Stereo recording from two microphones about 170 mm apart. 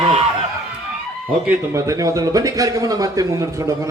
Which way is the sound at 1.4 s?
15° right (ahead or behind).